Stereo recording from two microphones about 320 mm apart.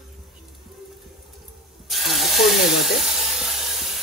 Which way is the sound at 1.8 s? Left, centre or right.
Centre.